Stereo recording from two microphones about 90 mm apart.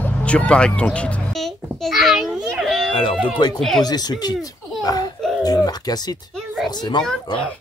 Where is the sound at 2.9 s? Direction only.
75° left (ahead or behind).